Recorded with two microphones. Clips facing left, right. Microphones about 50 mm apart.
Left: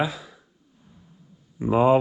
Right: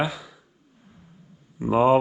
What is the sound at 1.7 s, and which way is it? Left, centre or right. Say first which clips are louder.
Speech: even; right.